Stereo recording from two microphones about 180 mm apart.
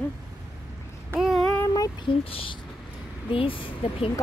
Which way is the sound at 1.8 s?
30° left (ahead or behind).